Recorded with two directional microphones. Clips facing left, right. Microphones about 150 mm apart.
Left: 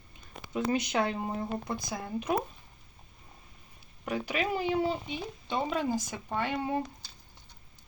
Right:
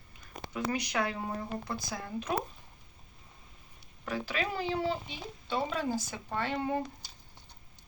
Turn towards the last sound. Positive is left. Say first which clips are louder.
# left 1 dB
turn(degrees=15)  # may be behind; listen again after turning